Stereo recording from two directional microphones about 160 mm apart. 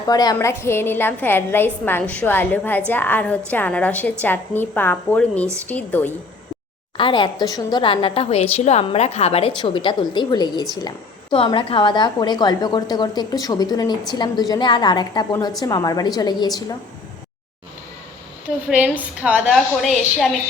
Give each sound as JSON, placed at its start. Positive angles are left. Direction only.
{"t": 0.1, "sound": "a woman's voice", "side_deg": 25}
{"t": 6.9, "sound": "a woman's voice", "side_deg": 30}
{"t": 18.7, "sound": "a woman's voice", "side_deg": -10}